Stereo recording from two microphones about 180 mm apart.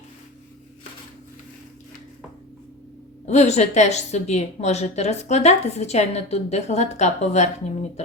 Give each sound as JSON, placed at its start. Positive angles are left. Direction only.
{"t": 3.2, "sound": "a woman's voice", "side_deg": 40}